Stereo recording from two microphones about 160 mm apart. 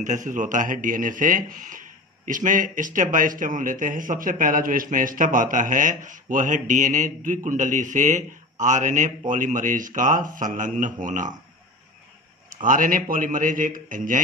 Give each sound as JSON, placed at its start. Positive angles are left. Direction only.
{"t": 0.0, "sound": "speech", "side_deg": -50}
{"t": 12.6, "sound": "speech", "side_deg": -55}